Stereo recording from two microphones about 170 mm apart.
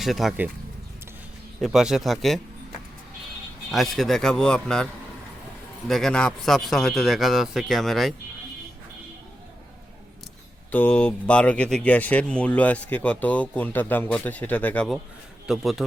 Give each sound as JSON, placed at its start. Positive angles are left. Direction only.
{"t": 0.0, "sound": "a man's voice", "side_deg": 0}
{"t": 1.6, "sound": "a man's voice", "side_deg": 0}
{"t": 3.7, "sound": "a man's voice", "side_deg": 0}
{"t": 5.9, "sound": "a man's voice", "side_deg": 5}
{"t": 10.7, "sound": "speech", "side_deg": 10}
{"t": 15.4, "sound": "a man's voice", "side_deg": 0}